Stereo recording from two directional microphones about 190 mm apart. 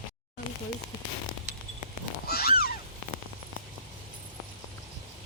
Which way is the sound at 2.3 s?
55° left (ahead or behind).